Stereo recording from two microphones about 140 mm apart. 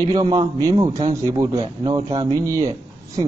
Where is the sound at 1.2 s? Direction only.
25° right (ahead or behind).